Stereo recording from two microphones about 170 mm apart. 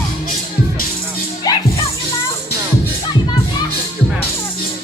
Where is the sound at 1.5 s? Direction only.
20° left (ahead or behind).